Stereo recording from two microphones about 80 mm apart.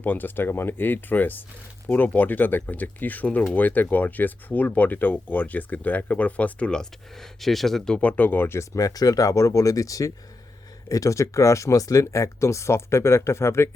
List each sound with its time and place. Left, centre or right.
0.0 s speech: left; by 8.0 s centre
8.0 s speech: left